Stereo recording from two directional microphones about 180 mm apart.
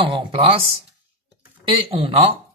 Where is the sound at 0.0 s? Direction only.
30° right (ahead or behind).